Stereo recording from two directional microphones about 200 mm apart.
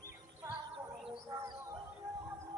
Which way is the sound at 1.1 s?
20° right (ahead or behind).